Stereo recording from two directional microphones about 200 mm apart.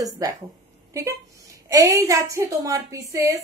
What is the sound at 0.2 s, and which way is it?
Speech, 15° right (ahead or behind).